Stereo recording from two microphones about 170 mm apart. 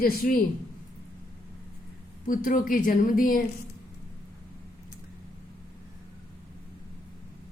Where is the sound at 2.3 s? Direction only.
55° left (ahead or behind).